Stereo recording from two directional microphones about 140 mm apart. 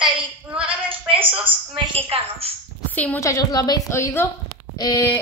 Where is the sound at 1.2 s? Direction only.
10° right (ahead or behind).